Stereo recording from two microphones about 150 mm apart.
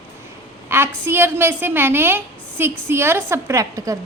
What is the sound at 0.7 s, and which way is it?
A woman's voice, 15° right (ahead or behind).